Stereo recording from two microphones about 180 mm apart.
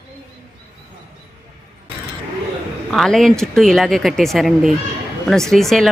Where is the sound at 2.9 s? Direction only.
Centre (ahead or behind).